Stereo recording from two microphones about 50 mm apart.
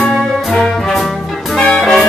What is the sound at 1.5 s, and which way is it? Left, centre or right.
Music, centre.